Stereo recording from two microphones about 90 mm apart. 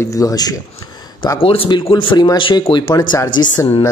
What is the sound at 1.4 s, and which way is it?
Speech, 90° left.